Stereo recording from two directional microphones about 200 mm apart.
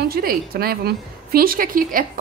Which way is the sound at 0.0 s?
50° right (ahead or behind).